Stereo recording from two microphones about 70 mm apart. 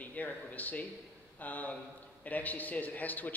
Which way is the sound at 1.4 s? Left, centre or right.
Left.